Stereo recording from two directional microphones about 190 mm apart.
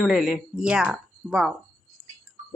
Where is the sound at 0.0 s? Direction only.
Centre (ahead or behind).